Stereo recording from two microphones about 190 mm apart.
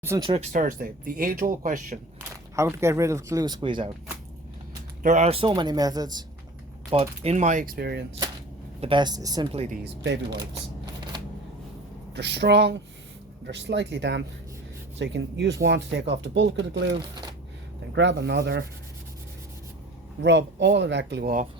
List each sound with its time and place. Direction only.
0.0 s speech: 15° right (ahead or behind)
0.5 s speech: 45° right (ahead or behind)
2.6 s speech: 15° right (ahead or behind)
5.0 s speech: 35° right (ahead or behind); by 6.2 s 20° right (ahead or behind)
6.9 s speech: 30° right (ahead or behind); by 8.0 s 55° right (ahead or behind)
8.8 s speech: 25° right (ahead or behind)
9.5 s speech: 35° right (ahead or behind)
9.8 s speech: 65° right (ahead or behind)
12.1 s speech: 65° right (ahead or behind)
20.2 s speech: 65° right (ahead or behind)